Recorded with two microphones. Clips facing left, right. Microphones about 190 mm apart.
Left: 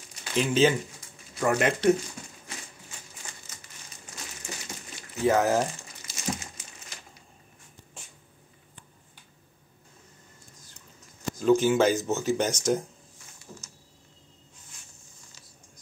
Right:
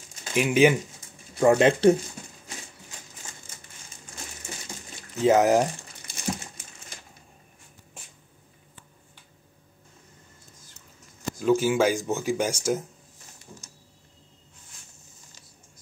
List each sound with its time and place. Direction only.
0.3 s speech: 15° right (ahead or behind)
1.4 s speech: 30° right (ahead or behind)
5.2 s speech: 20° right (ahead or behind)
6.0 s crumpling: 55° right (ahead or behind)
11.3 s speech: 5° right (ahead or behind)